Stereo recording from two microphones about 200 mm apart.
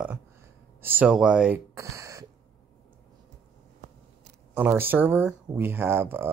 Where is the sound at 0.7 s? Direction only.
10° right (ahead or behind).